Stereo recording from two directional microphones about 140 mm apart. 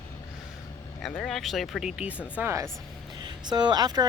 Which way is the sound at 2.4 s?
20° right (ahead or behind).